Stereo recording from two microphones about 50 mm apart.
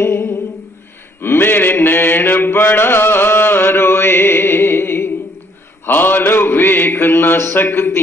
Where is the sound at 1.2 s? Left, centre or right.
Left.